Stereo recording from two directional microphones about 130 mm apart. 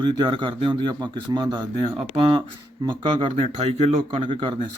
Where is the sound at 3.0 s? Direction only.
45° right (ahead or behind).